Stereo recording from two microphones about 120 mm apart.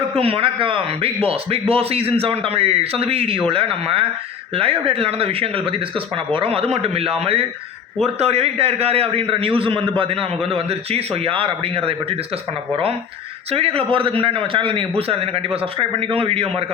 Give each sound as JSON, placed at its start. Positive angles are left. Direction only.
{"t": 0.2, "sound": "a man's voice", "side_deg": -50}
{"t": 13.5, "sound": "a man's voice", "side_deg": -55}